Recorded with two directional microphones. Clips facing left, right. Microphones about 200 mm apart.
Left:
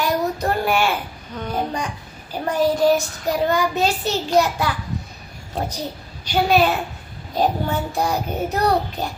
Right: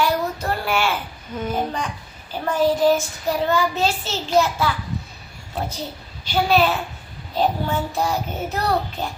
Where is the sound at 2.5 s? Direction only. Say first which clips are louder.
Even; 15° left (ahead or behind).